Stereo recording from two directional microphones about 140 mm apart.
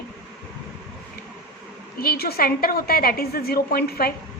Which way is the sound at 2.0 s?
90° left.